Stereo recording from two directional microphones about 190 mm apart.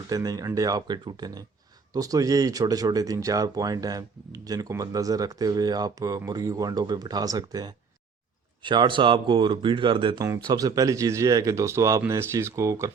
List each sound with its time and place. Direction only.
0.1 s speech: 20° right (ahead or behind)